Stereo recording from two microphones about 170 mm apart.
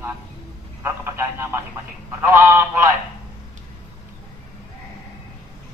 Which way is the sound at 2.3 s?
15° right (ahead or behind).